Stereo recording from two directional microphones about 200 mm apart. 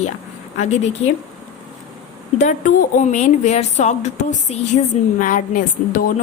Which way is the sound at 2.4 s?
40° left (ahead or behind).